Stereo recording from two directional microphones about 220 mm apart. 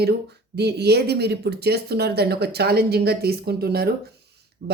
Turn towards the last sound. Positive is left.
turn(degrees=-50)  # may be behind; listen again after turning